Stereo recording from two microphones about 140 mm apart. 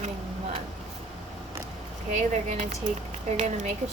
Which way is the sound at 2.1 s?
55° right (ahead or behind).